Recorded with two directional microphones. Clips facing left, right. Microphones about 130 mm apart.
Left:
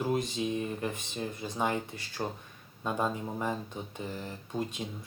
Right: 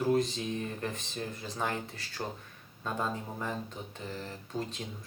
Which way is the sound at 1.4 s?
15° left (ahead or behind).